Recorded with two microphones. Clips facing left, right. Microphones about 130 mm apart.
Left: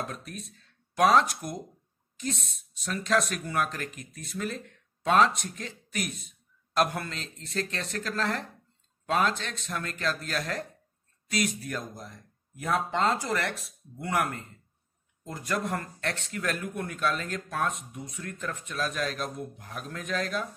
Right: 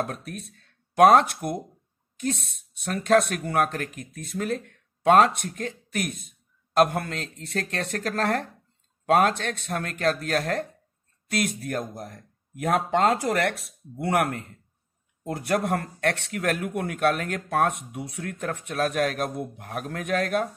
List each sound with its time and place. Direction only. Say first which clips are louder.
0.0 s speech: right 6 dB; 55° right (ahead or behind)
2.7 s speech: right 7 dB; 55° right (ahead or behind)